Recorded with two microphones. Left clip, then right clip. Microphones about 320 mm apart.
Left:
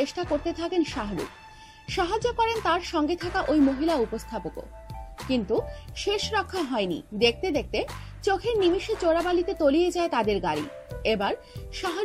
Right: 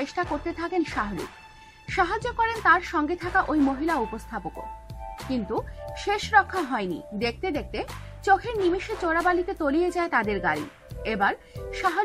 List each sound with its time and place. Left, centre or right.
0.1 s a woman's voice: centre
5.9 s a woman's voice: centre